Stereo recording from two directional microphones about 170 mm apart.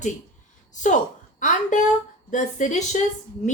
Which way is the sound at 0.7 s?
45° left (ahead or behind).